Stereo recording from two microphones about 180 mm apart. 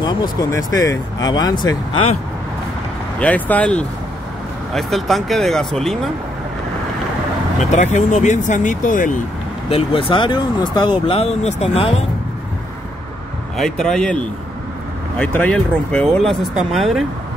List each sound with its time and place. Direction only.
0.0 s speech: 20° left (ahead or behind)
3.2 s speech: 10° left (ahead or behind)
7.7 s speech: 40° left (ahead or behind)
9.7 s speech: 30° left (ahead or behind)
13.6 s speech: 5° left (ahead or behind)